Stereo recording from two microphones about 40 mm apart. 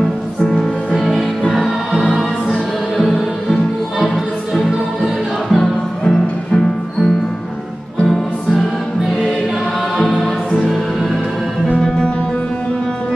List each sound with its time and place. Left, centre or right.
0.4 s music: centre
4.6 s music: centre
5.6 s music: centre
8.1 s music: centre
9.9 s music: centre
11.7 s music: left